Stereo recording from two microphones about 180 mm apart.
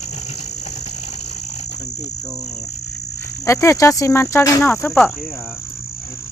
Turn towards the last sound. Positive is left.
turn(degrees=10)  # may be behind; listen again after turning